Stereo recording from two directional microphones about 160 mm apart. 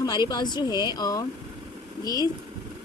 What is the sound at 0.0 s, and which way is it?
A woman's voice, 25° left (ahead or behind).